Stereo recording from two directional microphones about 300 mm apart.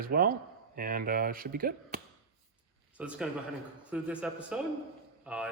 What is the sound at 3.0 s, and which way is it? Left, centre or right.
A man's voice, centre.